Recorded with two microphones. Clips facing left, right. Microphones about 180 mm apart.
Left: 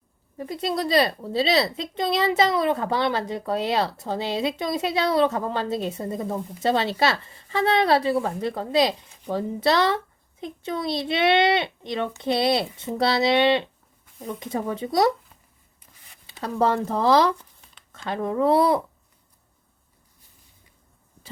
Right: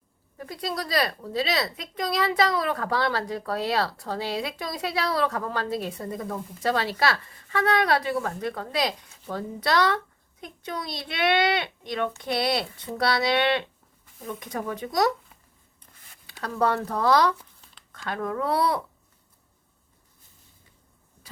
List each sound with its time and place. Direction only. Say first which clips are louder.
0.3 s speech: left 5 dB; 25° left (ahead or behind)
15.9 s a sound: left 1 dB; 5° left (ahead or behind)
16.2 s speech: left 2 dB; 25° left (ahead or behind)